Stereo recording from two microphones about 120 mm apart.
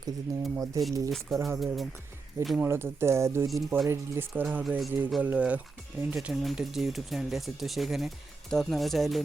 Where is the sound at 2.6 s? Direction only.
20° right (ahead or behind).